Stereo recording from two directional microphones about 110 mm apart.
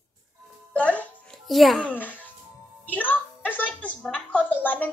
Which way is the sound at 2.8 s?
15° left (ahead or behind).